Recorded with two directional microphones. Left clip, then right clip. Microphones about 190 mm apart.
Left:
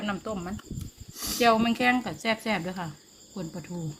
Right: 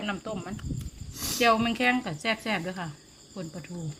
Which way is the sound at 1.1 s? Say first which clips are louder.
Even; 35° right (ahead or behind).